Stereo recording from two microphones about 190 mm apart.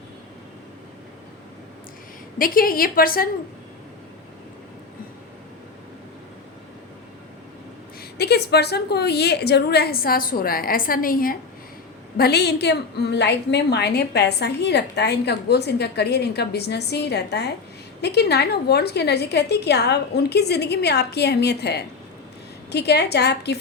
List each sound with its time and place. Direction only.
2.4 s a woman's voice: 50° left (ahead or behind)
8.2 s a woman's voice: 60° left (ahead or behind)